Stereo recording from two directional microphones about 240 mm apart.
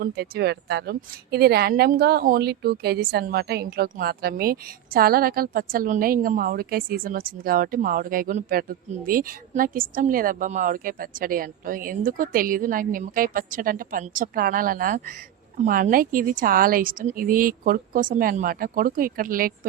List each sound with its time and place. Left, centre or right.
0.0 s a woman's voice: right